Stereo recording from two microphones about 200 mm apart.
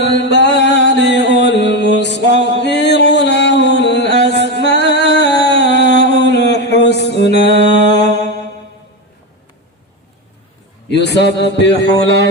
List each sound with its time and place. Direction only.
0.0 s music: 60° left (ahead or behind)
10.8 s a man's voice: 60° left (ahead or behind)